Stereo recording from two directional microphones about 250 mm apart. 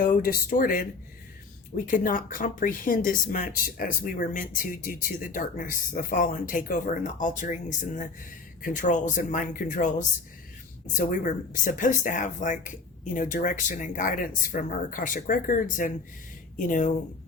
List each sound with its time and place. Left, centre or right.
0.0 s speech: left